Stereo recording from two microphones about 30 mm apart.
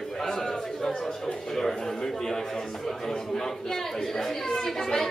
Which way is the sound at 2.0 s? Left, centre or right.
Centre.